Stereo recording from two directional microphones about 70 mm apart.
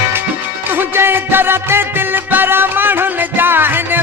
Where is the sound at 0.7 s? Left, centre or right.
Right.